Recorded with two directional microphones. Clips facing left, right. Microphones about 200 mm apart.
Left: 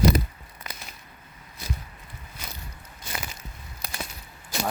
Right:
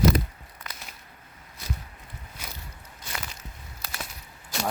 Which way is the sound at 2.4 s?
10° right (ahead or behind).